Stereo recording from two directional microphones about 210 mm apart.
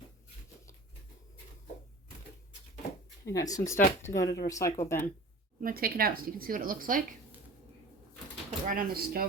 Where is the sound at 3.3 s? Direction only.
15° left (ahead or behind).